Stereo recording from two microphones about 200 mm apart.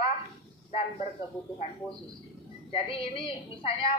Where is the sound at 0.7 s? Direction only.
35° left (ahead or behind).